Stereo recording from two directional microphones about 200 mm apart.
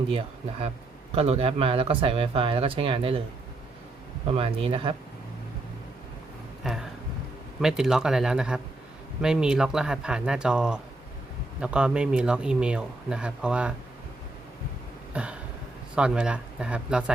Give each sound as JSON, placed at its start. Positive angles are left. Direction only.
{"t": 0.1, "sound": "speech", "side_deg": -30}
{"t": 4.3, "sound": "speech", "side_deg": -30}
{"t": 6.6, "sound": "a sound", "side_deg": 0}
{"t": 7.6, "sound": "speech", "side_deg": -5}
{"t": 15.1, "sound": "a sound", "side_deg": -5}
{"t": 16.0, "sound": "speech", "side_deg": -5}